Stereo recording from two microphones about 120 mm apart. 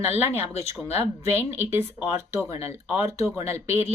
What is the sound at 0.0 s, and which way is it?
Speech, 20° right (ahead or behind).